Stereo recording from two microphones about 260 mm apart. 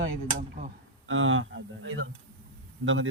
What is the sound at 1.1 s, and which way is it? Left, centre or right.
Speech, right.